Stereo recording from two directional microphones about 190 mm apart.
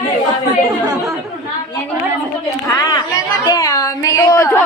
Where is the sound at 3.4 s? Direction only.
20° left (ahead or behind).